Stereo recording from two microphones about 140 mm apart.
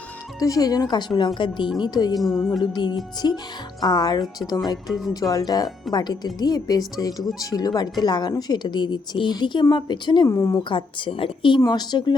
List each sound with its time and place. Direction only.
0.3 s a woman's voice: 25° left (ahead or behind)
2.1 s a woman's voice: centre (ahead or behind)
2.6 s a woman's voice: 30° left (ahead or behind)
4.9 s a woman's voice: centre (ahead or behind)
5.3 s a woman's voice: 25° left (ahead or behind)
10.2 s a woman's voice: 20° left (ahead or behind)
10.6 s speech: 35° left (ahead or behind)